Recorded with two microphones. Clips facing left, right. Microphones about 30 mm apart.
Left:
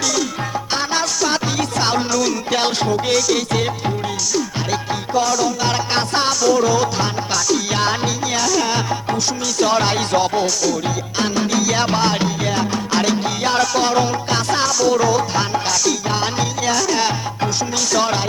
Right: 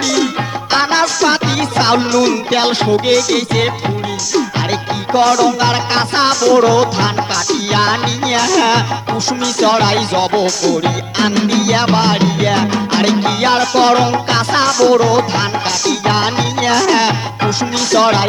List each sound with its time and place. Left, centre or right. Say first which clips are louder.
0.7 s music: right 9 dB; right
2.8 s music: right 5 dB; right
5.5 s music: right 5 dB; right
6.7 s music: right 6 dB; right
8.4 s music: right 7 dB; right
9.7 s music: right 4 dB; right
11.5 s music: right 3 dB; right
12.5 s music: right 6 dB; right
12.9 s music: right 4 dB; right
13.2 s music: right 5 dB; right
14.8 s music: right 5 dB; right